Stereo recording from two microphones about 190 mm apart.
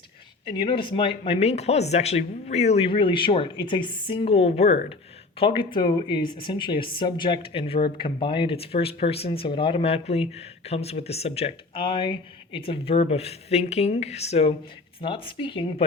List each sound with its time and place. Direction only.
0.5 s speech: 25° left (ahead or behind)